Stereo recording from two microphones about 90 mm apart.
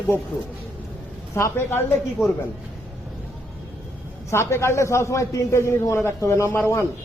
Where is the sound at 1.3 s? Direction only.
30° left (ahead or behind).